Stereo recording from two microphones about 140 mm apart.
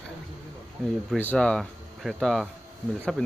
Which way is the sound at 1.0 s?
10° left (ahead or behind).